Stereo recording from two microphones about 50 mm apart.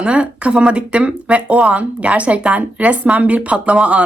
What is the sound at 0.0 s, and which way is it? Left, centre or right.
Speech, right.